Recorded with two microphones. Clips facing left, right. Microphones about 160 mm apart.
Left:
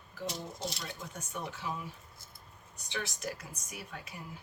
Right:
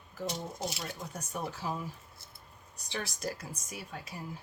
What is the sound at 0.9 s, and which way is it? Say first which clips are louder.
Speech: right 3 dB; 40° right (ahead or behind).